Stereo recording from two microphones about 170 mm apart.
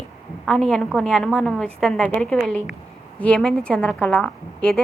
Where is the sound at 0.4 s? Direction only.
Centre (ahead or behind).